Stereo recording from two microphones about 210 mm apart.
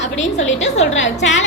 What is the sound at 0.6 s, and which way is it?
Speech, 30° left (ahead or behind).